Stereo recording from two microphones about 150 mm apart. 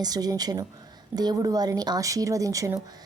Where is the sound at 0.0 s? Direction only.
25° right (ahead or behind).